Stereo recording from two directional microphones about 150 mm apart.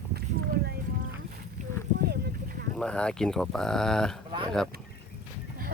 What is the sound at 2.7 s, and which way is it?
Speech, 5° left (ahead or behind).